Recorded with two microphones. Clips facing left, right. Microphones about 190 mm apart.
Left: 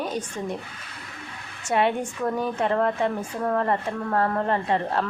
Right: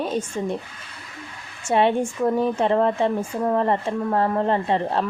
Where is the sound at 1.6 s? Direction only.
25° right (ahead or behind).